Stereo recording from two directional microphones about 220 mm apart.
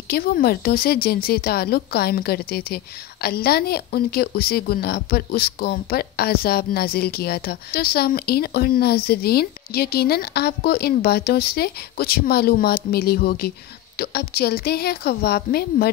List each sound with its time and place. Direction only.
0.1 s a woman's voice: 40° left (ahead or behind)